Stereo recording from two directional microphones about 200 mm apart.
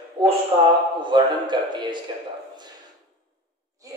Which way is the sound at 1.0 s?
20° right (ahead or behind).